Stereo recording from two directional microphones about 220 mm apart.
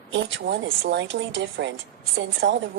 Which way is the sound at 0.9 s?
50° right (ahead or behind).